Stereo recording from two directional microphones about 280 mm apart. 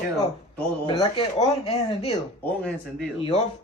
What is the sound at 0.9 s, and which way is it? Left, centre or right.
Speech, centre.